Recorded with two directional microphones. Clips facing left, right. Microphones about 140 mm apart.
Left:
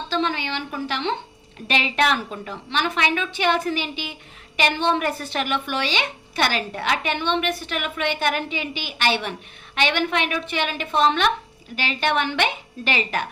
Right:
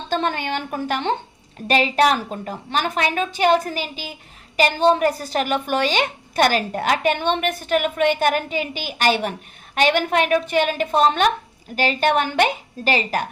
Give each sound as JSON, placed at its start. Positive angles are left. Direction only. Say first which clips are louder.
{"t": 0.1, "sound": "a woman's voice", "louder": "right 3 dB", "side_deg": -50}